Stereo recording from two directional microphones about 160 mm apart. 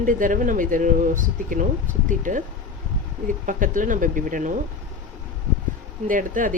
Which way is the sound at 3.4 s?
55° right (ahead or behind).